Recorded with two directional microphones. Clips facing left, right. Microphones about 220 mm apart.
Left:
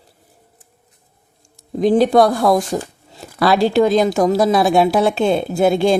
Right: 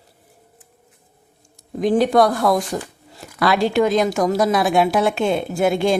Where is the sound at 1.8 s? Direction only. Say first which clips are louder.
Left 3 dB; 30° left (ahead or behind).